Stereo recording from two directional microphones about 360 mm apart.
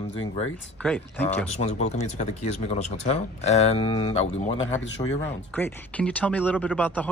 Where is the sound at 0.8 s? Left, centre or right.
Centre.